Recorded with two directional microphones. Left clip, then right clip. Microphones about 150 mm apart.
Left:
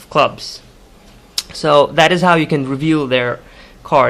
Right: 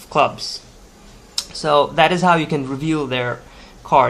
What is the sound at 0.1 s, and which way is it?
Speech, 25° left (ahead or behind).